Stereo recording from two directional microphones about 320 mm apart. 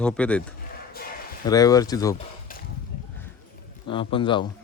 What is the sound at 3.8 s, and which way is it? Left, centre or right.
Speech, centre.